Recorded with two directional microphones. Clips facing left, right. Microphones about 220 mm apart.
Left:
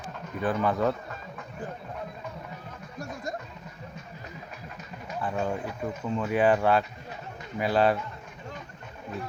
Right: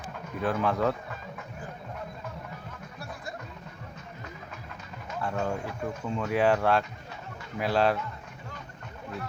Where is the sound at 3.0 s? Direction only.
45° left (ahead or behind).